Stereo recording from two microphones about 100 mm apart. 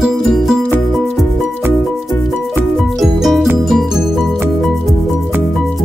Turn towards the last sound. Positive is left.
turn(degrees=0)  # may be behind; listen again after turning